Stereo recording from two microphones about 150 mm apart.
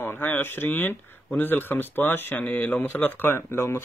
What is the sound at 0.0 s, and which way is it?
Speech, 15° left (ahead or behind).